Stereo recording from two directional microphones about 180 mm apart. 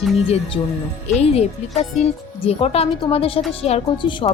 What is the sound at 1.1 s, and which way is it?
A woman's voice, 35° left (ahead or behind).